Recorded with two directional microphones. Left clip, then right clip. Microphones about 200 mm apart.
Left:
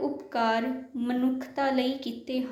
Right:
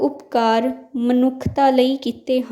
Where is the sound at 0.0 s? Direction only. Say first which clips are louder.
Right 9 dB; 55° right (ahead or behind).